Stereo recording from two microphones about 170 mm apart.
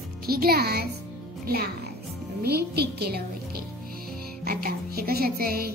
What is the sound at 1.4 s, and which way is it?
A child's voice, 65° right (ahead or behind).